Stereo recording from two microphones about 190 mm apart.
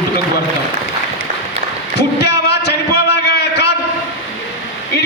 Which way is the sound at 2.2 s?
65° left (ahead or behind).